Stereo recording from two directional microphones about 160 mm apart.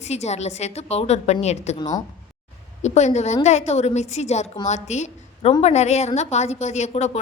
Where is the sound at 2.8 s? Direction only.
45° left (ahead or behind).